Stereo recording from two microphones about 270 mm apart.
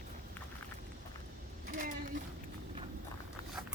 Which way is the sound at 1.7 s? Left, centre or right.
Right.